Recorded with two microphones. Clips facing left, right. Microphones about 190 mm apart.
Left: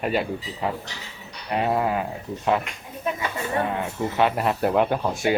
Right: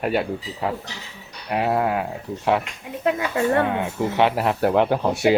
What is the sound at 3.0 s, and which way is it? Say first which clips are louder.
Speech: right 7 dB; 80° right.